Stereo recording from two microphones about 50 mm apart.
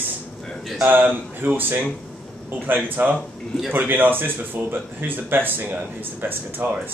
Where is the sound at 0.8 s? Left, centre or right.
Right.